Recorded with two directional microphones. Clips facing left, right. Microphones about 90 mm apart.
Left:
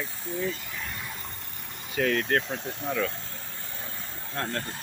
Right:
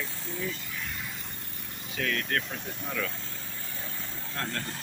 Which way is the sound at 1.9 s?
40° left (ahead or behind).